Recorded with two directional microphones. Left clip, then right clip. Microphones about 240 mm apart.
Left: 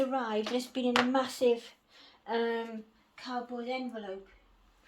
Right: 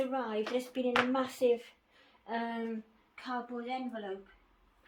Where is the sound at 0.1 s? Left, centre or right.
Left.